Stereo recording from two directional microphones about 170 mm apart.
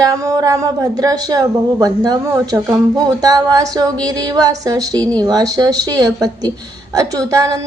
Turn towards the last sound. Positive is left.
turn(degrees=-20)  # may be behind; listen again after turning